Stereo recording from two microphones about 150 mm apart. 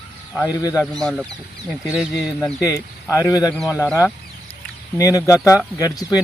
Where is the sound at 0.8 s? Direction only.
5° left (ahead or behind).